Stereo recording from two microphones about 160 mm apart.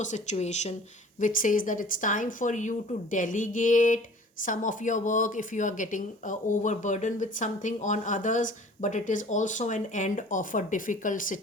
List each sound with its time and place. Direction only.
0.0 s speech: 50° left (ahead or behind)
1.2 s speech: 55° left (ahead or behind)